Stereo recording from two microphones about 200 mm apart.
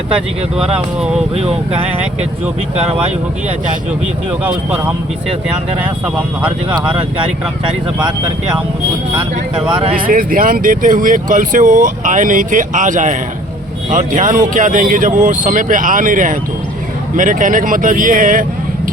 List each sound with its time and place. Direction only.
4.3 s speech: 10° right (ahead or behind)
10.1 s speech: 45° right (ahead or behind)